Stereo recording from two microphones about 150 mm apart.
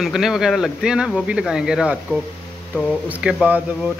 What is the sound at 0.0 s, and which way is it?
A man's voice, centre (ahead or behind).